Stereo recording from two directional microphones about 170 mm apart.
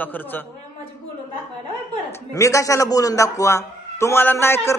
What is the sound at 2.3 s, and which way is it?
A man's voice, 20° left (ahead or behind).